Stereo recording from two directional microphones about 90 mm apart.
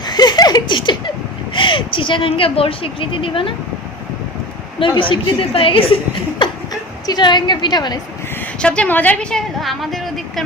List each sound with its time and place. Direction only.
0.0 s a sound: 50° left (ahead or behind)
1.5 s speech: 65° left (ahead or behind)
4.8 s a woman's voice: 75° left (ahead or behind)
7.1 s a woman's voice: 55° left (ahead or behind)
8.5 s a woman's voice: 10° left (ahead or behind)
9.3 s a woman's voice: centre (ahead or behind)